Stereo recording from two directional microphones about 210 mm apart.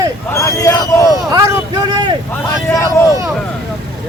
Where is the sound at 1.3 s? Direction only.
20° right (ahead or behind).